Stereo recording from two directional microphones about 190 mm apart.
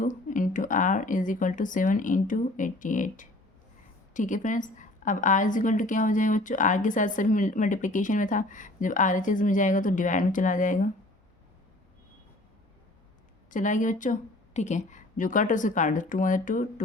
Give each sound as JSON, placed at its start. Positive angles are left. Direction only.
{"t": 0.0, "sound": "a woman's voice", "side_deg": 45}
{"t": 13.5, "sound": "a woman's voice", "side_deg": 40}